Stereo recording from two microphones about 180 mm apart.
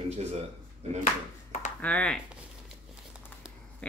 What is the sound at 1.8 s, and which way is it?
Speech, 5° left (ahead or behind).